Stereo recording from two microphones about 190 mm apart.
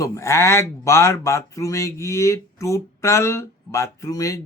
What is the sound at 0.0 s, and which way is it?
Speech, 15° left (ahead or behind).